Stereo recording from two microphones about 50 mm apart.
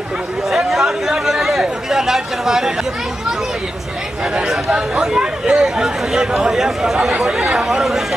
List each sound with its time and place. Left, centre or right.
0.5 s speech: centre
4.6 s speech: centre